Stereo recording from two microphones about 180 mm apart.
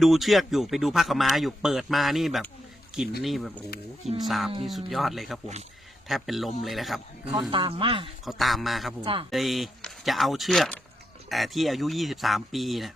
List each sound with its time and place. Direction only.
0.0 s a man's voice: centre (ahead or behind)
7.5 s speech: 30° right (ahead or behind)
8.2 s a man's voice: centre (ahead or behind)